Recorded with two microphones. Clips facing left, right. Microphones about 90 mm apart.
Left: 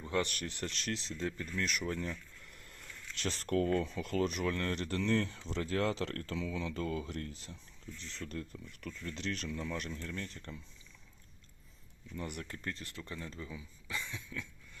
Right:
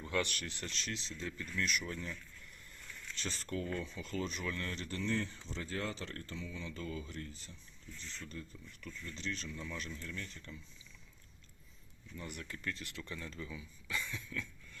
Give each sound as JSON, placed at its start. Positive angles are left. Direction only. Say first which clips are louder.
{"t": 0.2, "sound": "speech", "louder": "left 3 dB", "side_deg": 40}
{"t": 6.8, "sound": "speech", "louder": "left 5 dB", "side_deg": 60}
{"t": 12.1, "sound": "speech", "louder": "left 4 dB", "side_deg": 55}